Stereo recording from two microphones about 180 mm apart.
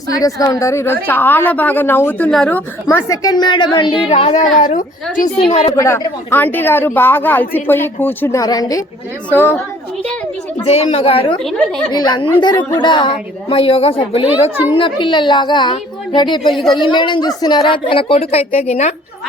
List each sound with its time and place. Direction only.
0.2 s speech: 20° left (ahead or behind)
2.8 s speech: 20° left (ahead or behind)
4.5 s a woman's voice: 45° left (ahead or behind)
5.5 s a woman's voice: 35° left (ahead or behind)
5.7 s speech: 15° left (ahead or behind)
10.6 s a woman's voice: 35° left (ahead or behind)
14.5 s a woman's voice: 10° right (ahead or behind)
14.8 s a woman's voice: 30° left (ahead or behind)